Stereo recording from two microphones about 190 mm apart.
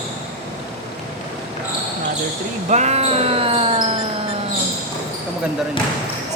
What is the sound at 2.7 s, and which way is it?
Basketball bounce, 35° right (ahead or behind).